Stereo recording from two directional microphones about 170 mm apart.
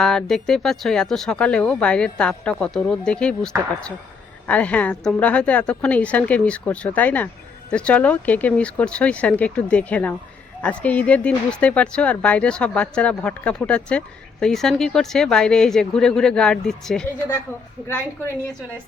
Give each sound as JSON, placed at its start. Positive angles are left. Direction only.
{"t": 0.0, "sound": "a woman's voice", "side_deg": 5}